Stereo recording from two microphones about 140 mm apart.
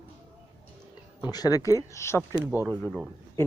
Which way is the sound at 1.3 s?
25° left (ahead or behind).